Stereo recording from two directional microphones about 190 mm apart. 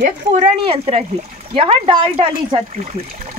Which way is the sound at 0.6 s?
30° right (ahead or behind).